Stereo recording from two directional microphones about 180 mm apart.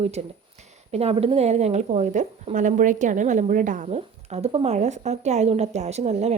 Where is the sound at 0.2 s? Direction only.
35° right (ahead or behind).